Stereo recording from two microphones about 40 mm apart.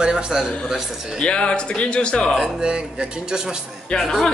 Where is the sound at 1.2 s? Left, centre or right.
Left.